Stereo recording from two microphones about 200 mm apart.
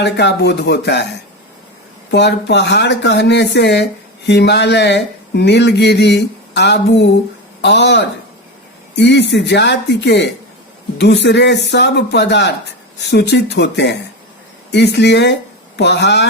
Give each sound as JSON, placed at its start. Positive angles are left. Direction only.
{"t": 0.0, "sound": "speech", "side_deg": 55}
{"t": 2.0, "sound": "speech", "side_deg": 60}